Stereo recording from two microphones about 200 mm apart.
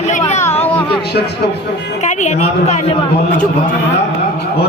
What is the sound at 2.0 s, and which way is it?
Speech, 35° left (ahead or behind).